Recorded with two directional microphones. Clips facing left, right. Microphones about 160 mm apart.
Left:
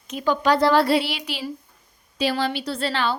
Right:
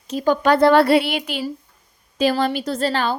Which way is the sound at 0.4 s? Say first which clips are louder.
Right 4 dB; 55° right (ahead or behind).